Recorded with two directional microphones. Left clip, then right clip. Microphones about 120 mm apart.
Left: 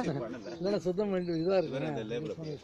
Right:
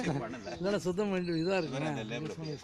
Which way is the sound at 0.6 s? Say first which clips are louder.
Left 1 dB; 55° right (ahead or behind).